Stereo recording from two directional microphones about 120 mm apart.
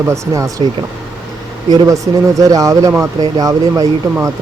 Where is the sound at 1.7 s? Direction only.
35° right (ahead or behind).